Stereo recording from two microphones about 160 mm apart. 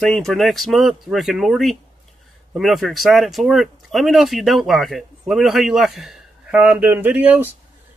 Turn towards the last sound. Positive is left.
turn(degrees=-10)  # may be behind; listen again after turning